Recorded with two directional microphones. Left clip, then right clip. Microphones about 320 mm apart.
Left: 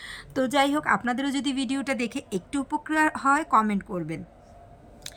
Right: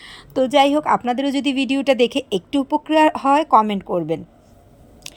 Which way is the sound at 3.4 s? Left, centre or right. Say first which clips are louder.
Right 8 dB; centre.